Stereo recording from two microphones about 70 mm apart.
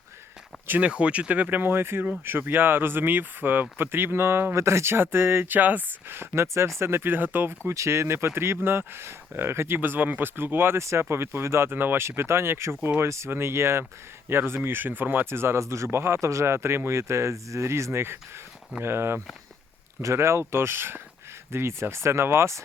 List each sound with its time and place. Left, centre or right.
0.8 s speech: centre
7.7 s speech: right